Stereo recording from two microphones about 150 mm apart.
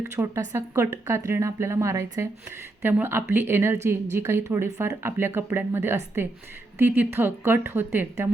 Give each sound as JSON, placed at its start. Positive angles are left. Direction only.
{"t": 0.2, "sound": "a woman's voice", "side_deg": -20}